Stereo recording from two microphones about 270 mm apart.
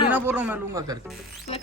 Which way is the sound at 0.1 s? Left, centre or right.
Centre.